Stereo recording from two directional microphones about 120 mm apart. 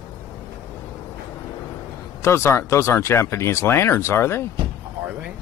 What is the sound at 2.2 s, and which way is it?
Speech, 20° left (ahead or behind).